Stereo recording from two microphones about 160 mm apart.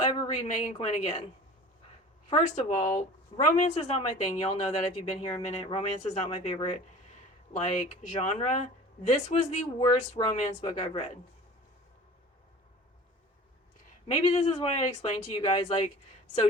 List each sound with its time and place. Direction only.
0.4 s speech: 45° left (ahead or behind)
2.3 s speech: 50° left (ahead or behind)
9.7 s speech: 25° left (ahead or behind)
10.6 s speech: 35° left (ahead or behind)
14.1 s speech: 40° left (ahead or behind)